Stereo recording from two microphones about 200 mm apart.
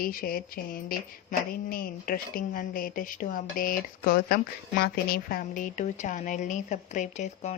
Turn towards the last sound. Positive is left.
turn(degrees=35)  # may be behind; listen again after turning